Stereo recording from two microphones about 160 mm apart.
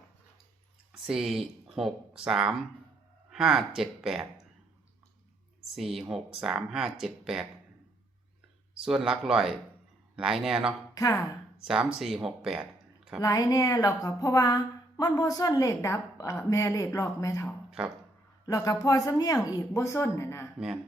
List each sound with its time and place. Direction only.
1.0 s speech: centre (ahead or behind)
5.7 s speech: centre (ahead or behind)
8.8 s speech: 5° right (ahead or behind)
10.9 s speech: 20° left (ahead or behind)
11.6 s speech: 5° right (ahead or behind)
13.2 s a woman's voice: 20° left (ahead or behind)
17.7 s music: 5° right (ahead or behind)
18.4 s a woman's voice: 20° left (ahead or behind)